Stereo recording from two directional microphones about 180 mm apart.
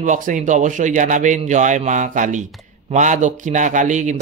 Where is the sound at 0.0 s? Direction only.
45° right (ahead or behind).